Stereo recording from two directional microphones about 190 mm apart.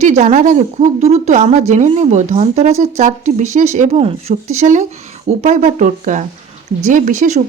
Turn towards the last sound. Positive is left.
turn(degrees=-40)  # may be behind; listen again after turning